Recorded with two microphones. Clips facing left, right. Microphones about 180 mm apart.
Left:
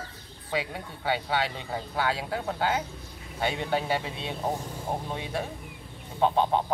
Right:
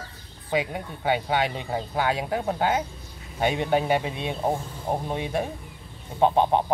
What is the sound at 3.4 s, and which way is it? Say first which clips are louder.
Speech: right 5 dB; 15° right (ahead or behind).